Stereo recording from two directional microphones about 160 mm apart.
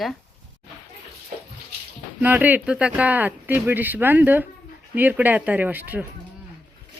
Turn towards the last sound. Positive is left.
turn(degrees=-10)  # may be behind; listen again after turning